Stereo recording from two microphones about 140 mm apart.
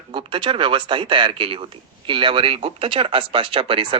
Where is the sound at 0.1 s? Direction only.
35° right (ahead or behind).